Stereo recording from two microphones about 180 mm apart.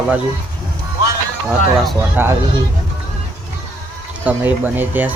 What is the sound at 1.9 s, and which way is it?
Speech, 10° right (ahead or behind).